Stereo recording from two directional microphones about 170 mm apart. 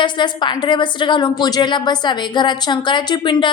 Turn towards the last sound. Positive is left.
turn(degrees=30)  # may be behind; listen again after turning